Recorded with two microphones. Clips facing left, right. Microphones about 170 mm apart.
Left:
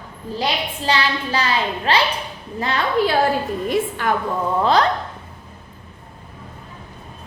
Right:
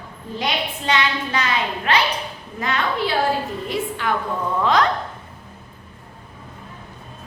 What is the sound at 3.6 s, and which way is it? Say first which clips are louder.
Speech: left 5 dB; 50° left (ahead or behind).